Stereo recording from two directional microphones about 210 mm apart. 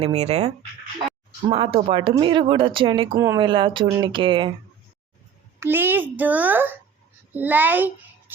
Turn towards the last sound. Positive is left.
turn(degrees=-10)  # may be behind; listen again after turning